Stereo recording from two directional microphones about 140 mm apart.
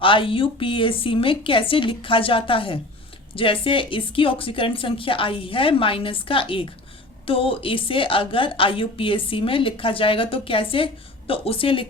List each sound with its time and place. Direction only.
0.0 s a woman's voice: 40° left (ahead or behind)